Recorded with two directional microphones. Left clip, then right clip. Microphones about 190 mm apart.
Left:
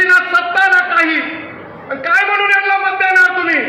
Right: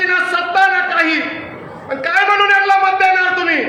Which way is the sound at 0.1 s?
50° right (ahead or behind).